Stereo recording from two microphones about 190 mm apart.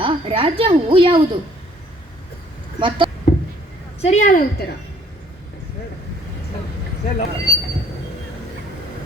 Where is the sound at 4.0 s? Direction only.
40° left (ahead or behind).